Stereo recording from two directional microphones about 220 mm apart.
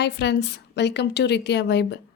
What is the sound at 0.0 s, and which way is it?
Speech, 50° left (ahead or behind).